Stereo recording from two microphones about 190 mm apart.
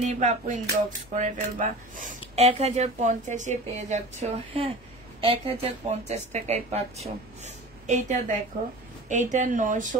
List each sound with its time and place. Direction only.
0.0 s a woman's voice: 40° right (ahead or behind)